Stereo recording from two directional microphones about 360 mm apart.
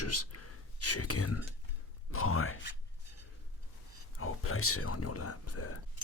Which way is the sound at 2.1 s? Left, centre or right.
Left.